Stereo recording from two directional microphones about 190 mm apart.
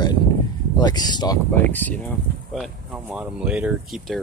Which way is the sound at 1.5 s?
10° left (ahead or behind).